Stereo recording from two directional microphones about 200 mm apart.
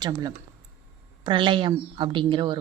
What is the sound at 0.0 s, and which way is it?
Speech, 20° right (ahead or behind).